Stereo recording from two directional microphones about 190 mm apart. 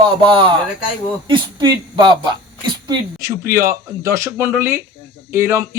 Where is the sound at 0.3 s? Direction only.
25° right (ahead or behind).